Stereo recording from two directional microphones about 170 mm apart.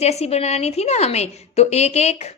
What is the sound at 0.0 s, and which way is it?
Speech, 40° left (ahead or behind).